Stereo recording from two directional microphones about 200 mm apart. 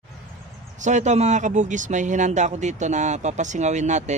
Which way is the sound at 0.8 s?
35° right (ahead or behind).